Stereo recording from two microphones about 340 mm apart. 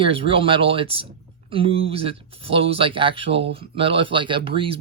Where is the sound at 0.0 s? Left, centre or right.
Centre.